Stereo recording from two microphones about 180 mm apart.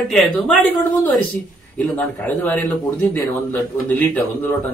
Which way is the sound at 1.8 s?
10° left (ahead or behind).